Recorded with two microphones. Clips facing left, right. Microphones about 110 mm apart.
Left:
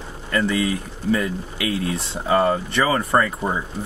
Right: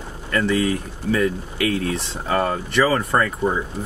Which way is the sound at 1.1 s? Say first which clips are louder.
Right 3 dB; 20° left (ahead or behind).